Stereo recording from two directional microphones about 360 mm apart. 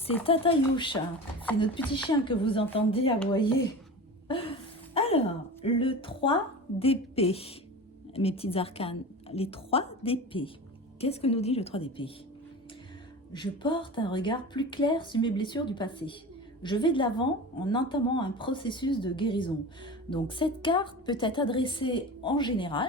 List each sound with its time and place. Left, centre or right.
0.3 s speech: centre
4.3 s a sound: centre
5.6 s speech: centre
13.3 s speech: centre